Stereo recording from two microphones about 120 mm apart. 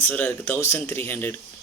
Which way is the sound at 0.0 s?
15° left (ahead or behind).